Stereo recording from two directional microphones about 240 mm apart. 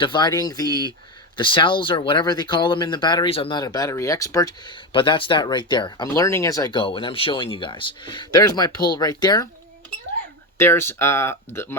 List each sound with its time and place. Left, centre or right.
0.0 s speech: centre
10.6 s speech: centre